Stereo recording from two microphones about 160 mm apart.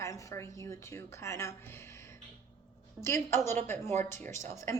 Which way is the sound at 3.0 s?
15° left (ahead or behind).